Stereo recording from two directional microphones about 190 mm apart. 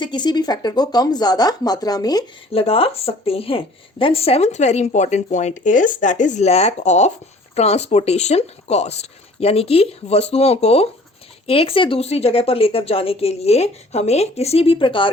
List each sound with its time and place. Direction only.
0.0 s speech: 25° left (ahead or behind)
2.5 s speech: 30° left (ahead or behind)